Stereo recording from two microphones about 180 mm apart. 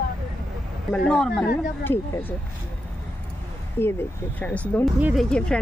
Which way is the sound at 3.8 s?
15° left (ahead or behind).